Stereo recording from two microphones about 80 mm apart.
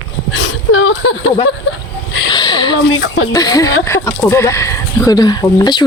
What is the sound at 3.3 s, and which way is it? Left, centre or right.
Speech, left.